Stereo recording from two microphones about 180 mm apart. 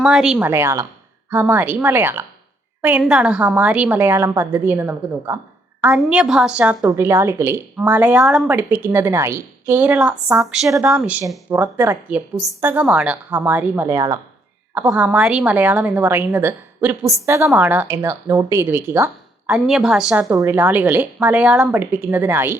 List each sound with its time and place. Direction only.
0.0 s a woman's voice: centre (ahead or behind)
10.7 s a woman's voice: 15° right (ahead or behind)
14.8 s a woman's voice: 5° right (ahead or behind)
19.5 s a woman's voice: centre (ahead or behind)
20.3 s a woman's voice: 15° right (ahead or behind)